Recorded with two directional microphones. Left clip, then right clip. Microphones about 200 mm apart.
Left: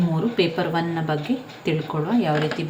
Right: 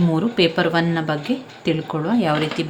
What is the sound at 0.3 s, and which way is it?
Speech, 50° right (ahead or behind).